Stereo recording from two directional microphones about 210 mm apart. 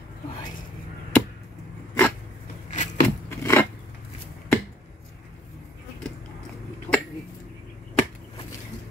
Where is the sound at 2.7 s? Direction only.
35° left (ahead or behind).